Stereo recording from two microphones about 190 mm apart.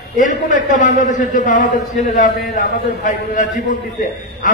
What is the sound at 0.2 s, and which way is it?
A man's voice, 40° left (ahead or behind).